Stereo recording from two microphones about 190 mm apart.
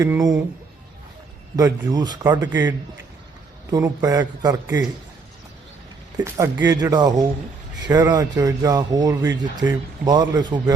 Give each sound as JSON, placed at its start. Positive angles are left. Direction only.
{"t": 0.0, "sound": "speech", "side_deg": -20}
{"t": 1.5, "sound": "speech", "side_deg": -20}
{"t": 3.7, "sound": "speech", "side_deg": -20}
{"t": 6.1, "sound": "speech", "side_deg": -15}